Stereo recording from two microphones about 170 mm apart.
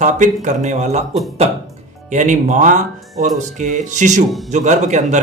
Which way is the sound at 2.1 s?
45° right (ahead or behind).